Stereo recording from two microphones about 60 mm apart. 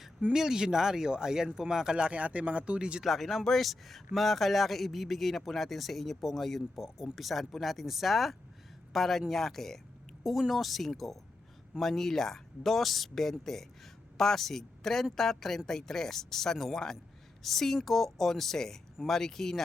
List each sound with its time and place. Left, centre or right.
0.3 s speech: centre
3.0 s a man's voice: centre